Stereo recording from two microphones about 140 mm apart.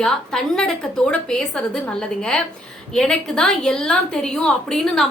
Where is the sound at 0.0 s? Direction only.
5° left (ahead or behind).